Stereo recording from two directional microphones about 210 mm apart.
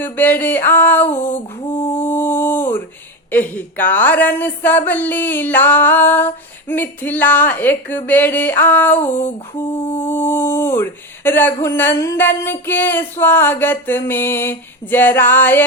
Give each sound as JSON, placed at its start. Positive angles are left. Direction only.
{"t": 0.0, "sound": "a woman's voice", "side_deg": 10}
{"t": 1.1, "sound": "a sound", "side_deg": 10}
{"t": 3.3, "sound": "a woman's voice", "side_deg": 10}
{"t": 9.7, "sound": "mantra", "side_deg": 25}
{"t": 10.0, "sound": "a woman's voice", "side_deg": 10}